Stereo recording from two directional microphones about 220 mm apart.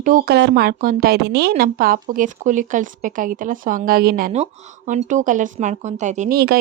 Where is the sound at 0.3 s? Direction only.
50° right (ahead or behind).